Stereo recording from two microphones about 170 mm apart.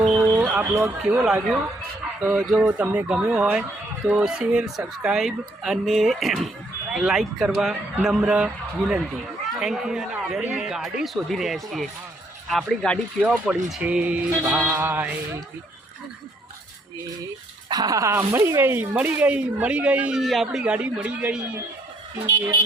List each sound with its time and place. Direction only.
0.2 s a sound: 10° right (ahead or behind)
1.2 s a man's voice: 5° right (ahead or behind)
13.2 s speech: 5° right (ahead or behind)
17.7 s speech: 20° right (ahead or behind); by 21.4 s 5° right (ahead or behind)
22.3 s speech: 15° right (ahead or behind)